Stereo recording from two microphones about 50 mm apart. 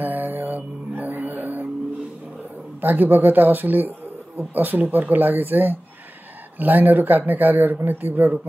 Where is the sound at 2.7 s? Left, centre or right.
Right.